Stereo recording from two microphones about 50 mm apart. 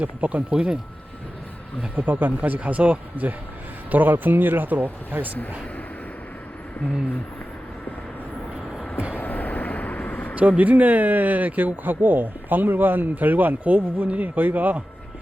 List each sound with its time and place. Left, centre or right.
0.0 s speech: right
2.0 s speech: right
3.9 s speech: right
9.1 s vehicle: left
10.3 s speech: right